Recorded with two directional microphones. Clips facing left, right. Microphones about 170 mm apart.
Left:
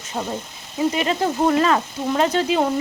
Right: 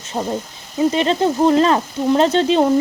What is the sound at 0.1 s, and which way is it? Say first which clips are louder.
Speech: right 4 dB; 20° right (ahead or behind).